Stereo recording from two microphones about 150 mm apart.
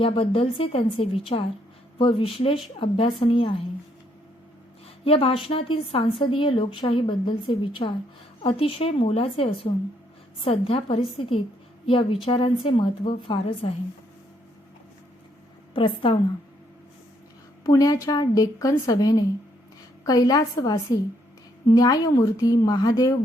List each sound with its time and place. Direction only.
0.0 s a woman's voice: 40° left (ahead or behind)
5.0 s a woman's voice: 40° left (ahead or behind)
15.7 s a woman's voice: 35° left (ahead or behind)
17.6 s a woman's voice: 25° left (ahead or behind)